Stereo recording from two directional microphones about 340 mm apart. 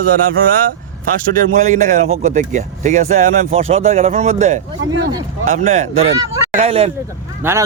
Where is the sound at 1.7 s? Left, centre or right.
Right.